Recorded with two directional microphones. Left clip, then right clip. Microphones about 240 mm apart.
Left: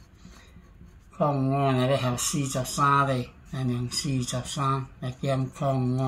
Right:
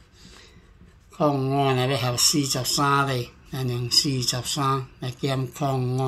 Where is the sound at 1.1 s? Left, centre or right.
Right.